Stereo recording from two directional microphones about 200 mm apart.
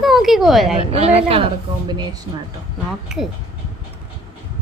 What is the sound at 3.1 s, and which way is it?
Speech, 5° right (ahead or behind).